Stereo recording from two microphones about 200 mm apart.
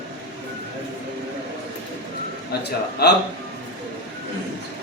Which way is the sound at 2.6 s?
55° left (ahead or behind).